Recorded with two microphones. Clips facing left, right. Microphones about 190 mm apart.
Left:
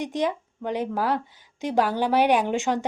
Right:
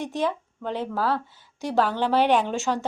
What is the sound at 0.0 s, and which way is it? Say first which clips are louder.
A woman's voice: left 1 dB; 15° left (ahead or behind).